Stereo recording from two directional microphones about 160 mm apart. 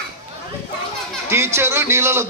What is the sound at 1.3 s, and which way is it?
Speech, 15° right (ahead or behind).